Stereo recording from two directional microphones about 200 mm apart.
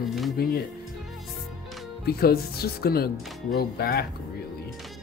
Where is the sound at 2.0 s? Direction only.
50° left (ahead or behind).